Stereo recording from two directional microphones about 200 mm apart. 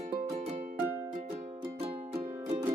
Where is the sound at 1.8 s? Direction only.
30° right (ahead or behind).